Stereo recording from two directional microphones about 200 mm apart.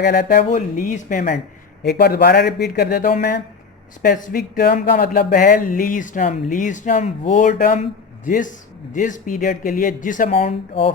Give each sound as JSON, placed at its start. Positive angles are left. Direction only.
{"t": 0.0, "sound": "speech", "side_deg": 55}
{"t": 0.5, "sound": "speech", "side_deg": 40}